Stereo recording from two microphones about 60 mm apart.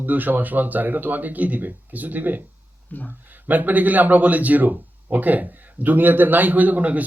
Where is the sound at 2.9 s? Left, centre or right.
Left.